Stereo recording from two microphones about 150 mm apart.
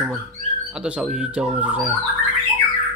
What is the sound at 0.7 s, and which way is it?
Speech, 5° right (ahead or behind).